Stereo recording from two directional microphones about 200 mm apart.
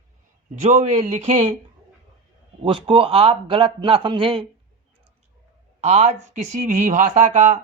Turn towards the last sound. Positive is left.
turn(degrees=-35)  # may be behind; listen again after turning